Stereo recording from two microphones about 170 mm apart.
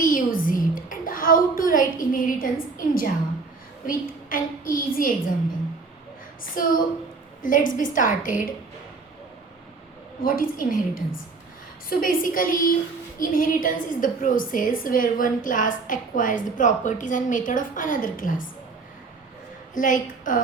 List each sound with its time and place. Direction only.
0.0 s a sound: 55° left (ahead or behind)
3.8 s a woman's voice: 55° left (ahead or behind)
6.6 s a woman's voice: 55° left (ahead or behind)
10.2 s a woman's voice: 55° left (ahead or behind)
19.7 s a woman's voice: 50° left (ahead or behind)